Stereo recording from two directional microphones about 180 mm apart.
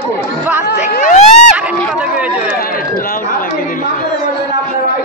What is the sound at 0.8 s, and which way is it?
Speech, 45° left (ahead or behind).